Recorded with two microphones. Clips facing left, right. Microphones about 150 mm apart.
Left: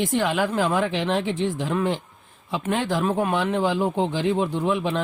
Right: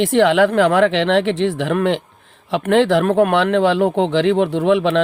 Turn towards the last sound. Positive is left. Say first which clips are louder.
# right 8 dB
turn(degrees=-75)  # may be behind; listen again after turning